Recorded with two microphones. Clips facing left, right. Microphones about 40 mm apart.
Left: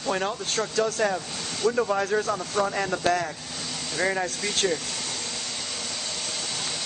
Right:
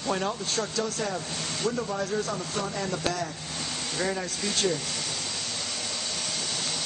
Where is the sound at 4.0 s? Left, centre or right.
Left.